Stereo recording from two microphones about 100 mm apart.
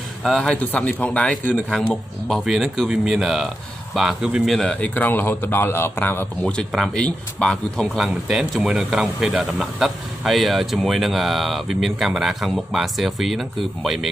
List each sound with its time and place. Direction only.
0.2 s speech: 5° left (ahead or behind)
2.2 s speech: centre (ahead or behind)
4.6 s speech: 10° left (ahead or behind)
6.7 s speech: 5° left (ahead or behind)
8.0 s speech: 5° right (ahead or behind)